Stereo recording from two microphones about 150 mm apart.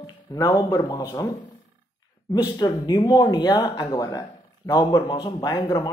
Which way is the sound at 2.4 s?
25° left (ahead or behind).